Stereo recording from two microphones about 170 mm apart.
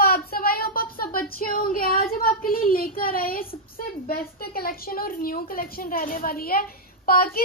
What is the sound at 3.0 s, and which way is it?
A woman's voice, 60° left (ahead or behind).